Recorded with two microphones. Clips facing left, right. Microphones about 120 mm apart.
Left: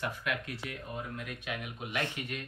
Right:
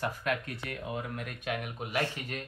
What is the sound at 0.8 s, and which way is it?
Speech, 80° right.